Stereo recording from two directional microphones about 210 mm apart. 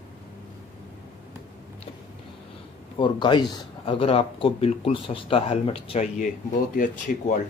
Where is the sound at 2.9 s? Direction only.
20° left (ahead or behind).